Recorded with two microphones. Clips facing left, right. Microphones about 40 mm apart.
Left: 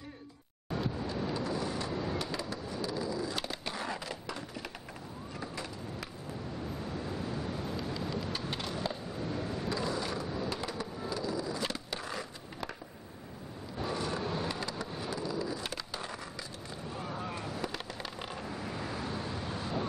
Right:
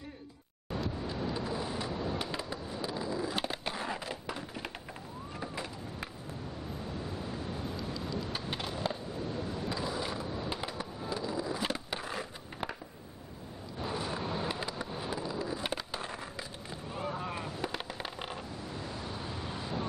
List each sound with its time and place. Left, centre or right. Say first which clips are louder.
0.7 s vehicle: left 1 dB; centre
1.9 s fireworks: even; centre
2.3 s skateboard: left 1 dB; centre
7.5 s vehicle: left 1 dB; centre
8.3 s a sound: even; centre
9.7 s mechanisms: left 2 dB; centre
10.3 s skateboard: left 1 dB; centre
11.1 s a sound: right 1 dB; centre
13.7 s skateboard: left 1 dB; centre
16.9 s boat: right 3 dB; centre
17.6 s a sound: right 1 dB; right
18.8 s vehicle: left 2 dB; centre